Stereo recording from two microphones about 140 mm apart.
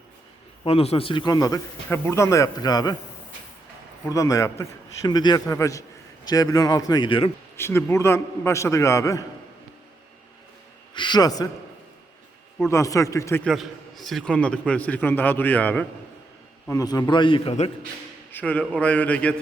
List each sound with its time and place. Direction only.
0.6 s a man's voice: 45° left (ahead or behind); by 2.9 s 30° left (ahead or behind)
4.1 s a man's voice: 25° left (ahead or behind)
7.5 s a man's voice: 15° left (ahead or behind)
10.9 s a man's voice: 35° left (ahead or behind)
12.6 s a man's voice: 20° left (ahead or behind)
13.4 s a man's voice: centre (ahead or behind)
16.6 s a man's voice: 25° left (ahead or behind)
18.3 s a man's voice: 10° left (ahead or behind)